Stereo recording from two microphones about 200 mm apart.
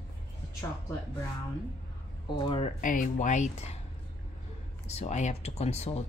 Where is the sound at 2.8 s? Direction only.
40° left (ahead or behind).